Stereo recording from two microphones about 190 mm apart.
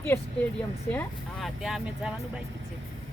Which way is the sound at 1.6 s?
5° right (ahead or behind).